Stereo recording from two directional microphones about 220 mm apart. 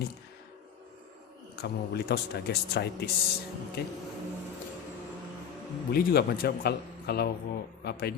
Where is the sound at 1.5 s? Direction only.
50° left (ahead or behind).